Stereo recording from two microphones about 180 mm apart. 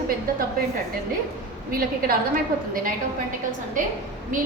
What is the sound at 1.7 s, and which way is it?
A woman's voice, 55° right (ahead or behind).